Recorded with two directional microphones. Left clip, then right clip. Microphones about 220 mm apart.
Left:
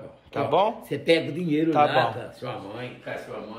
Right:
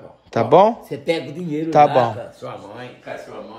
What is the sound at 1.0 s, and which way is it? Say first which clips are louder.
Speech: left 1 dB; 20° right (ahead or behind).